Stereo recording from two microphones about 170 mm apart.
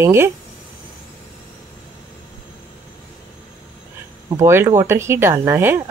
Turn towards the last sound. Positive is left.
turn(degrees=-15)  # may be behind; listen again after turning